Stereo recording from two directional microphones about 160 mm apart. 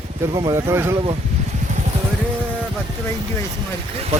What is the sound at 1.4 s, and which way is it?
Vehicle, 45° right (ahead or behind).